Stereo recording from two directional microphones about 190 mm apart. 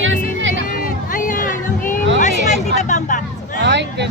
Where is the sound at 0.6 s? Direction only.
45° left (ahead or behind).